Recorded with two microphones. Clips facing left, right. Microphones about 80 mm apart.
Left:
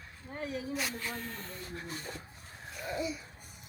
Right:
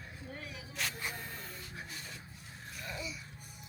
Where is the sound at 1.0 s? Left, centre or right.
Centre.